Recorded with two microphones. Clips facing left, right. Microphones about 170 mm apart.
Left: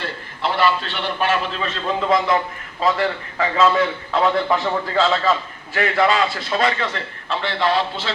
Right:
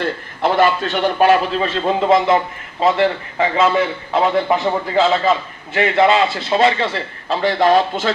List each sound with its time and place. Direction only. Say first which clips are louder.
0.0 s a man's voice: right 6 dB; 45° right (ahead or behind)